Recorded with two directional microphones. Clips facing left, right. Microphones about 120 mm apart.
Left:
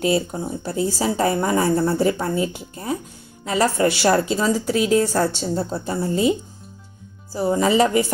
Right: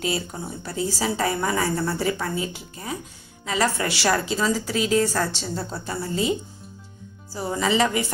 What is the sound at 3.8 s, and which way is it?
Speech, 30° left (ahead or behind).